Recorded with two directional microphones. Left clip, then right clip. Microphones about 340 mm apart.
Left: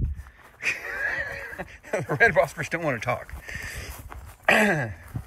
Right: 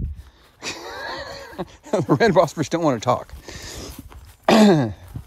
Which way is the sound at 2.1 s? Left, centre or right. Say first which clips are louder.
Right 3 dB; right.